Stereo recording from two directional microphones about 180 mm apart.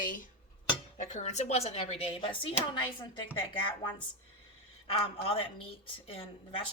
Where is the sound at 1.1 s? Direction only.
40° left (ahead or behind).